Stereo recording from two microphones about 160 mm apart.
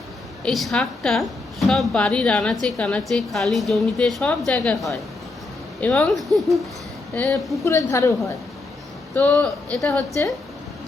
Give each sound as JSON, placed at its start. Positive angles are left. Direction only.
{"t": 0.4, "sound": "a woman's voice", "side_deg": 0}
{"t": 7.6, "sound": "a woman's voice", "side_deg": 20}
{"t": 9.1, "sound": "speech", "side_deg": 10}
{"t": 10.1, "sound": "a woman's voice", "side_deg": 20}